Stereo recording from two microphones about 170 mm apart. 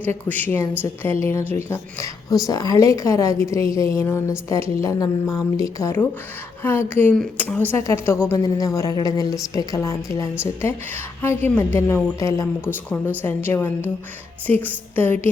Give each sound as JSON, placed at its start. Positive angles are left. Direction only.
{"t": 0.3, "sound": "a woman's voice", "side_deg": 10}